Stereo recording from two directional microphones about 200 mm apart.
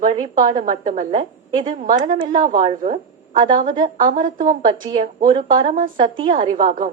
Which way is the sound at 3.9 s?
40° right (ahead or behind).